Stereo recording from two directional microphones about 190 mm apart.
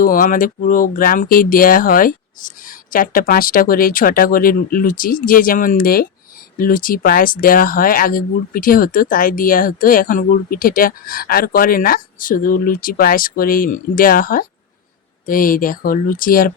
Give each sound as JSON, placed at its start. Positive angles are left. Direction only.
{"t": 0.0, "sound": "speech", "side_deg": 45}